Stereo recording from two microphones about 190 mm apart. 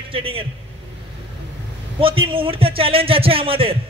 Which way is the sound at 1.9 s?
30° right (ahead or behind).